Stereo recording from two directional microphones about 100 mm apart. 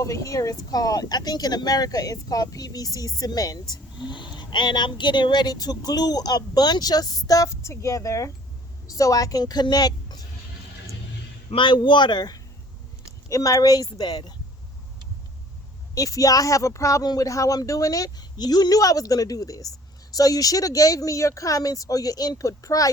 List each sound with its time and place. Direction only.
0.0 s a woman's voice: 35° left (ahead or behind)
11.5 s speech: 55° left (ahead or behind)
16.0 s speech: 35° left (ahead or behind)